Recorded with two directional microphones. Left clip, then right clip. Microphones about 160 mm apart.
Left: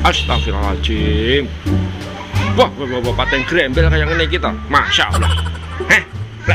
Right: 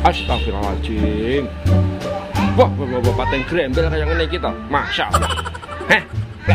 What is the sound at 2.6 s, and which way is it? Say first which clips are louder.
Speech: left 2 dB; 10° right (ahead or behind).